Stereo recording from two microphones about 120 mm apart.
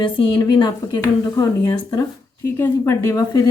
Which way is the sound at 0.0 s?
40° left (ahead or behind).